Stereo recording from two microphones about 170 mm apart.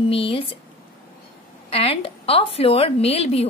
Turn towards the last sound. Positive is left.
turn(degrees=35)  # may be behind; listen again after turning